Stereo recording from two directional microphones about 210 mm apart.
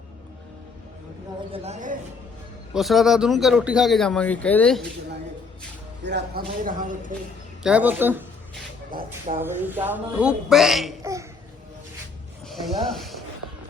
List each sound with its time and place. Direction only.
1.5 s speech: 30° right (ahead or behind)
2.7 s a man's voice: centre (ahead or behind)
6.0 s speech: 55° right (ahead or behind)
6.6 s speech: 40° right (ahead or behind)
7.6 s a woman's voice: 5° right (ahead or behind)
9.4 s a woman's voice: 10° right (ahead or behind)
11.0 s laughter: 15° right (ahead or behind)
12.5 s speech: centre (ahead or behind)